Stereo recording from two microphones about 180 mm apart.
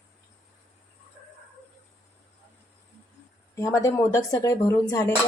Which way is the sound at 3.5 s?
15° left (ahead or behind).